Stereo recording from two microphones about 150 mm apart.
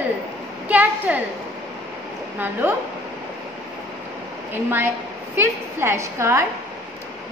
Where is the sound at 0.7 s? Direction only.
10° right (ahead or behind).